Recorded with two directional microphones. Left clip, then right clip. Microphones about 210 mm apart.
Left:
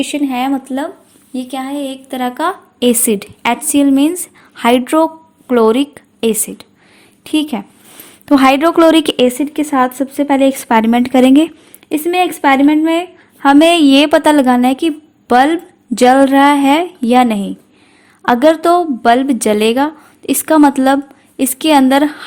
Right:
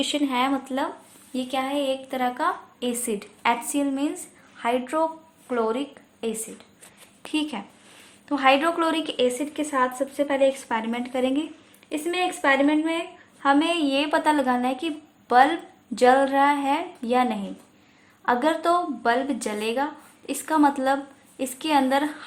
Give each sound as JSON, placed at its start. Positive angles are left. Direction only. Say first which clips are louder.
{"t": 0.0, "sound": "a woman's voice", "louder": "left 7 dB", "side_deg": 25}